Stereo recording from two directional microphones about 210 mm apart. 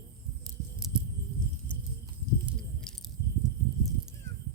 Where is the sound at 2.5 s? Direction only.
Centre (ahead or behind).